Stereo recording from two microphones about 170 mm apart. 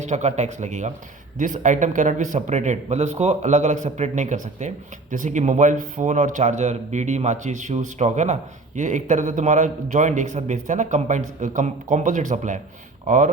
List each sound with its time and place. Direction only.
0.0 s a man's voice: 45° right (ahead or behind)